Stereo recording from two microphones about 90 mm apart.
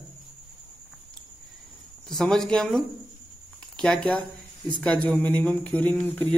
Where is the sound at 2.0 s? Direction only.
5° left (ahead or behind); by 6.3 s 20° left (ahead or behind).